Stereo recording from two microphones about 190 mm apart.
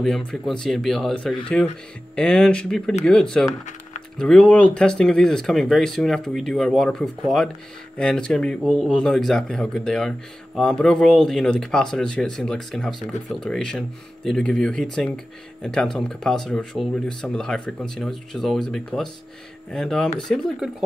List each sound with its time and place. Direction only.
0.0 s speech: centre (ahead or behind)